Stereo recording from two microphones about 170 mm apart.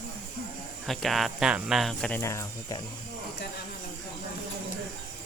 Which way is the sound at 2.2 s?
20° left (ahead or behind).